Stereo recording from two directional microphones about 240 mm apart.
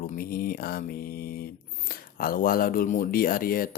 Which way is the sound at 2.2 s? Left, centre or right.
Left.